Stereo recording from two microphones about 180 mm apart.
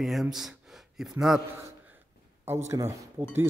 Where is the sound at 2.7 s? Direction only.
15° right (ahead or behind).